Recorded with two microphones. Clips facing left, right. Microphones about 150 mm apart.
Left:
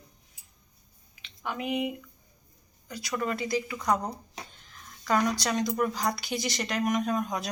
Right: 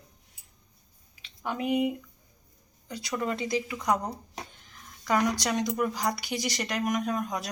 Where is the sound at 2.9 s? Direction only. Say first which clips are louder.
Even; 25° right (ahead or behind); by 7.2 s 5° right (ahead or behind).